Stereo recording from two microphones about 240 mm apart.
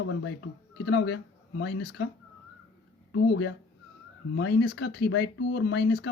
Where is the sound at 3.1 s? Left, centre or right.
Left.